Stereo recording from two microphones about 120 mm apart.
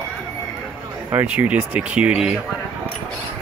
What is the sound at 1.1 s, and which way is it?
Speech, 10° right (ahead or behind).